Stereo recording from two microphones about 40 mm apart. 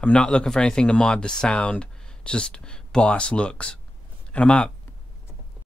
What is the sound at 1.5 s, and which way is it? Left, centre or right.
Speech, left.